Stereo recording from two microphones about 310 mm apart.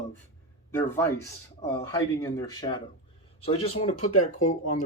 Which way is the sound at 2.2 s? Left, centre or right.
Centre.